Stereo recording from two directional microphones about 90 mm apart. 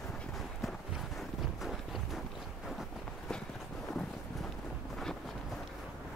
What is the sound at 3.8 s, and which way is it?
Thunder, 5° left (ahead or behind).